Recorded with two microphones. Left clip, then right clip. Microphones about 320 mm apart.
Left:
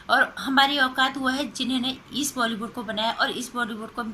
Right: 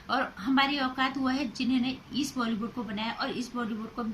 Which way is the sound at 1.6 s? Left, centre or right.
Right.